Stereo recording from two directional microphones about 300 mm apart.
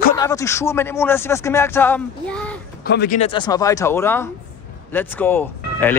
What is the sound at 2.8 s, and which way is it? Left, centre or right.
Speech, left.